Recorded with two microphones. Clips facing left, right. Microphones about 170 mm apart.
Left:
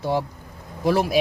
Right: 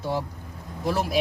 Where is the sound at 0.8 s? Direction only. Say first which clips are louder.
Left 5 dB; 80° left.